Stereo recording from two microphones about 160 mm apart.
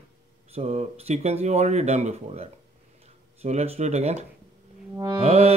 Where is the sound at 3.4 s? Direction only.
40° right (ahead or behind).